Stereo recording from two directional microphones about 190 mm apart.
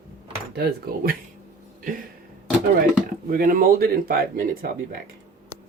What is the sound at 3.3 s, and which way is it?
Speech, 45° right (ahead or behind).